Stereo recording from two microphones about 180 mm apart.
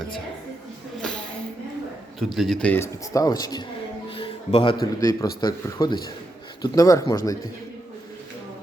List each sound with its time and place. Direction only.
2.1 s a man's voice: centre (ahead or behind); by 7.2 s 20° left (ahead or behind)